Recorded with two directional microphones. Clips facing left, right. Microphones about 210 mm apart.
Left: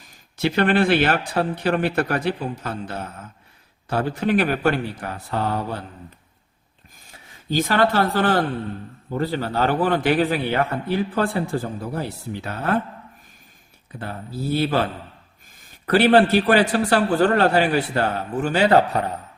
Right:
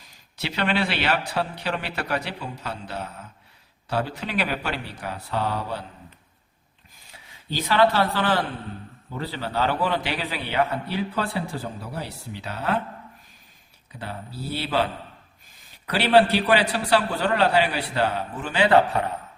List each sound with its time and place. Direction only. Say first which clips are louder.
0.3 s a man's voice: left 7 dB; 50° left (ahead or behind)
7.1 s a man's voice: left 7 dB; 45° left (ahead or behind)
14.0 s a man's voice: left 5 dB; 45° left (ahead or behind)
15.9 s a man's voice: left 4 dB; 50° left (ahead or behind)